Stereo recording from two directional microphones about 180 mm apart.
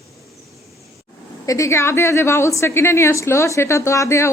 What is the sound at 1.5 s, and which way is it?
A woman's voice, 15° left (ahead or behind).